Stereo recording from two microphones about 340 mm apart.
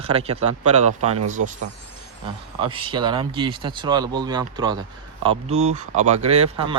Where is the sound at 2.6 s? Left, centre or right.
Centre.